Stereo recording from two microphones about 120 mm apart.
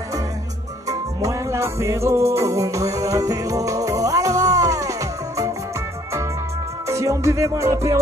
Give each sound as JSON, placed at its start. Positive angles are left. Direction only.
{"t": 0.8, "sound": "music", "side_deg": -25}
{"t": 6.9, "sound": "music", "side_deg": -25}